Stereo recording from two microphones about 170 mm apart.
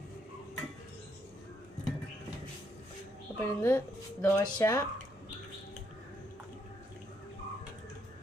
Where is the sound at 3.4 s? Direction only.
15° left (ahead or behind).